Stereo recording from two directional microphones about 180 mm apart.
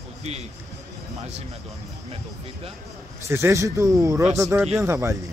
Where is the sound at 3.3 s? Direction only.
15° right (ahead or behind).